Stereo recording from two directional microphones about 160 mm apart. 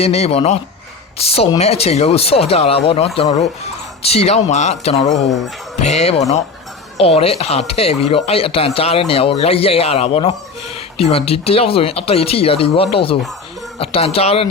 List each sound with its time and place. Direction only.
0.0 s speech: 40° left (ahead or behind)